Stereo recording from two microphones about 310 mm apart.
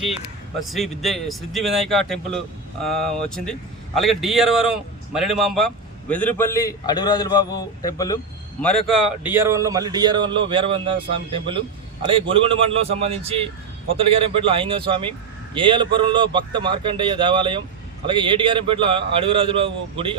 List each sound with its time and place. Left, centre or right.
0.7 s a man's voice: centre
8.9 s a man's voice: centre